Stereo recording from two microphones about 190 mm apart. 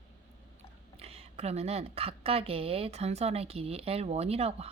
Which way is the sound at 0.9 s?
35° right (ahead or behind).